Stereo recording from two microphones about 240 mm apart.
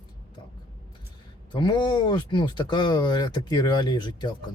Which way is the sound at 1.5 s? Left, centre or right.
Centre.